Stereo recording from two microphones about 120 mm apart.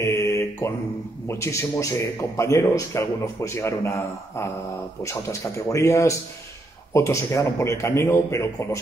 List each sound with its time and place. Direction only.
0.0 s mantra: 25° left (ahead or behind)
1.3 s a man's voice: 25° left (ahead or behind)
5.0 s a man's voice: 25° left (ahead or behind)